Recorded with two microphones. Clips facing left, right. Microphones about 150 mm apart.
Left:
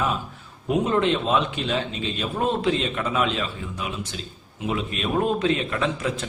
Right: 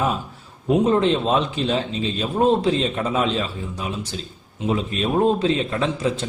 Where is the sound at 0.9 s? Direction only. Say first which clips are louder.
Right 2 dB; 35° right (ahead or behind).